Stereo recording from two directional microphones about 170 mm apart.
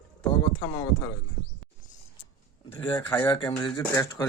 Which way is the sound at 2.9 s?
25° left (ahead or behind).